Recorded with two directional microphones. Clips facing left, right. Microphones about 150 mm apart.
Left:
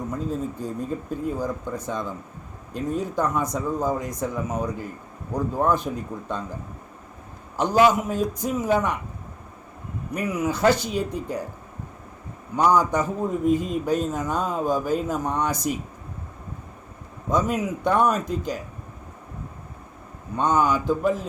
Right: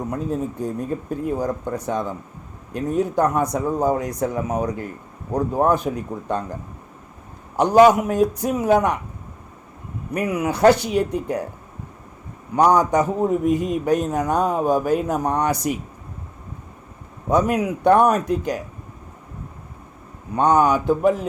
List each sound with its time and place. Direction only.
0.1 s a man's voice: 65° right (ahead or behind)
7.5 s a man's voice: 60° right (ahead or behind)
10.2 s a man's voice: 60° right (ahead or behind)
12.5 s a man's voice: 65° right (ahead or behind)
17.2 s a man's voice: 65° right (ahead or behind)
20.3 s a man's voice: 60° right (ahead or behind)